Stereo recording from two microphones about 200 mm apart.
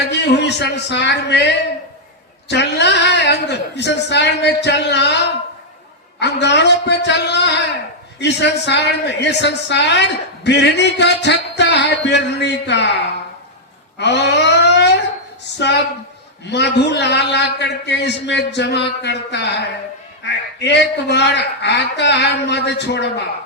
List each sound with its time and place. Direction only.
0.1 s a woman's voice: 60° left (ahead or behind)
14.0 s a sound: 60° left (ahead or behind)
15.5 s a woman's voice: 60° left (ahead or behind)